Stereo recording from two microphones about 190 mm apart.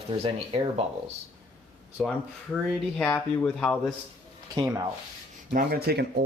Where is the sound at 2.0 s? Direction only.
Centre (ahead or behind).